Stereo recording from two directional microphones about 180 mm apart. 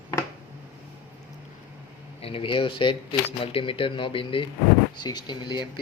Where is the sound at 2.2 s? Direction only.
30° left (ahead or behind).